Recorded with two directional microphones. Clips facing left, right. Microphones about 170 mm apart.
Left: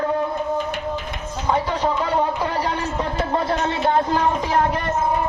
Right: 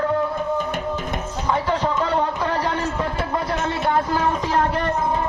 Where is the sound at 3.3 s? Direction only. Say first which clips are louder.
Left 2 dB; 25° left (ahead or behind).